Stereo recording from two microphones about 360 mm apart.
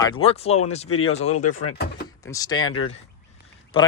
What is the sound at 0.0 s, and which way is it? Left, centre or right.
Speech, centre.